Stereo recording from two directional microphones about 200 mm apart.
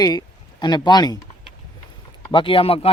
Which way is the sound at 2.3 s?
25° left (ahead or behind).